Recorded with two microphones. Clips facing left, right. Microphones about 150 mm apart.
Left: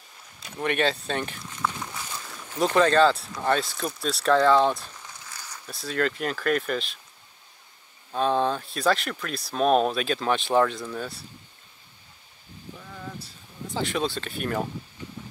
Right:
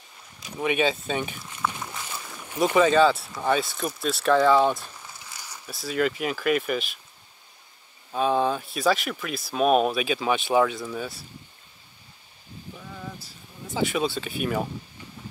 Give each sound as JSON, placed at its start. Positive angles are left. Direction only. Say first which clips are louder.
{"t": 0.6, "sound": "speech", "louder": "right 1 dB", "side_deg": -5}
{"t": 8.1, "sound": "speech", "louder": "right 1 dB", "side_deg": -10}
{"t": 12.7, "sound": "a sound", "louder": "even", "side_deg": -5}
{"t": 13.7, "sound": "speech", "louder": "right 2 dB", "side_deg": -5}